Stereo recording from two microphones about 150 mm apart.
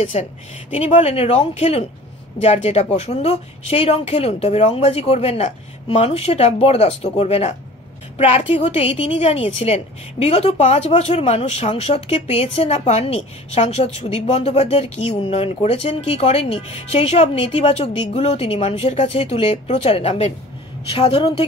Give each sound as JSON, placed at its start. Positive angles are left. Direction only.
{"t": 0.0, "sound": "a woman's voice", "side_deg": 50}